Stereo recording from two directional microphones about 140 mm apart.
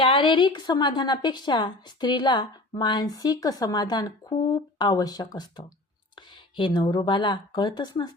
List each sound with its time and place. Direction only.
0.0 s a woman's voice: 35° left (ahead or behind)